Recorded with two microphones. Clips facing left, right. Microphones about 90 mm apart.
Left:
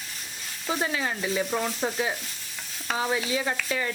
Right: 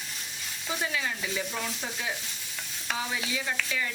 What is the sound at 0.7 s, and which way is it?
Stir, 40° left (ahead or behind).